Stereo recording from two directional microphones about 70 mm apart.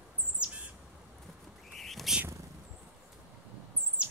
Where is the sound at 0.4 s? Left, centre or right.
Centre.